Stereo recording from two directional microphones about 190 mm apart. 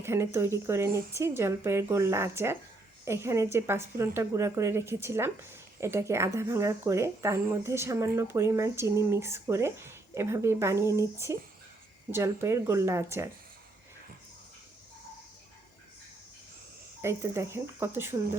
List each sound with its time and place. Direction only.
0.0 s speech: 15° right (ahead or behind)
17.0 s speech: 15° right (ahead or behind)